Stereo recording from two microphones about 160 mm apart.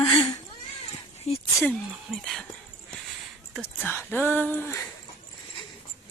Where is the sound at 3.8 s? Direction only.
15° left (ahead or behind).